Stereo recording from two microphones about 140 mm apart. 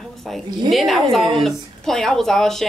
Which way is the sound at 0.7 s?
Centre (ahead or behind).